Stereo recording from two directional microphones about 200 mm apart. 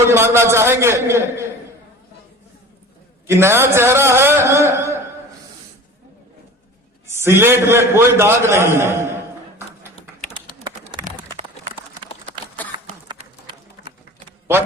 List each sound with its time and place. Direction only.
0.1 s a man's voice: 15° right (ahead or behind)
3.2 s a man's voice: 10° right (ahead or behind)
7.2 s a man's voice: 10° right (ahead or behind)
9.6 s a sound: 30° left (ahead or behind)
10.6 s bird: 25° right (ahead or behind)
13.1 s a sound: 25° right (ahead or behind)